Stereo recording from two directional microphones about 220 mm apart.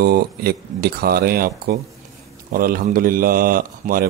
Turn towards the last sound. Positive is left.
turn(degrees=-40)  # may be behind; listen again after turning